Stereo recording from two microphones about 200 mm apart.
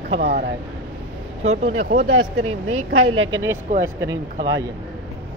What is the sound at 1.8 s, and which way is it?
Speech, 40° right (ahead or behind).